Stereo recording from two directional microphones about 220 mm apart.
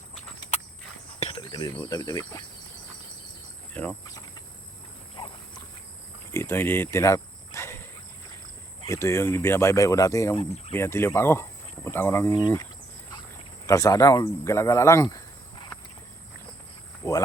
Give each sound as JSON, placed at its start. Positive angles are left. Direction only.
{"t": 0.1, "sound": "walk", "side_deg": 25}
{"t": 1.2, "sound": "speech", "side_deg": 25}
{"t": 3.8, "sound": "speech", "side_deg": 10}
{"t": 5.1, "sound": "dog", "side_deg": 20}
{"t": 6.3, "sound": "a sound", "side_deg": 10}
{"t": 8.8, "sound": "speech", "side_deg": 15}
{"t": 10.3, "sound": "speech", "side_deg": 25}
{"t": 10.8, "sound": "speech", "side_deg": 10}
{"t": 12.3, "sound": "speech", "side_deg": 20}
{"t": 13.7, "sound": "speech", "side_deg": 15}
{"t": 17.0, "sound": "cricket", "side_deg": 10}